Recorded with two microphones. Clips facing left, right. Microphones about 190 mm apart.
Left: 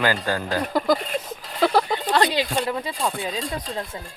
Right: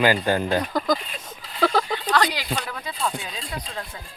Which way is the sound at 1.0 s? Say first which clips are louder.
Left 10 dB; 50° left (ahead or behind).